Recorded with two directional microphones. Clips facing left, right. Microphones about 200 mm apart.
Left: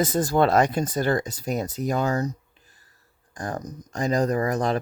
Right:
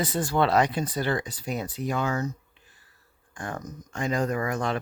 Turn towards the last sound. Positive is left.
turn(degrees=40)  # may be behind; listen again after turning